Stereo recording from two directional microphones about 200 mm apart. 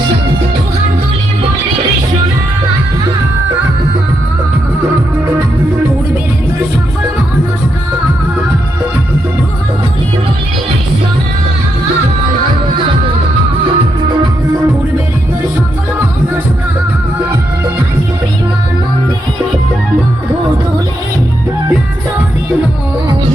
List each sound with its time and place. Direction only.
13.7 s music: 25° right (ahead or behind)